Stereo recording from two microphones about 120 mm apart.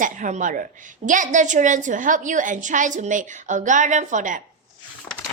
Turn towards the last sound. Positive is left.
turn(degrees=-90)